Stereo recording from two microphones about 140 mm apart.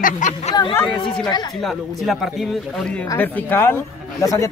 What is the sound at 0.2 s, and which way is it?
Speech, 65° left (ahead or behind).